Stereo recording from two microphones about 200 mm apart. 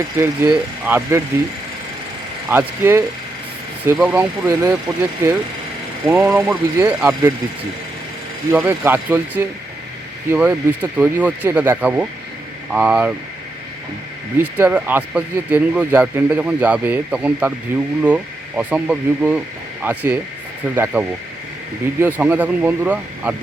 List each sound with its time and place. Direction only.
0.2 s speech: 20° right (ahead or behind)
0.9 s speech: 10° right (ahead or behind)
2.5 s speech: 10° right (ahead or behind)
8.5 s speech: 10° right (ahead or behind)
14.6 s speech: 10° right (ahead or behind)
22.0 s speech: 10° right (ahead or behind)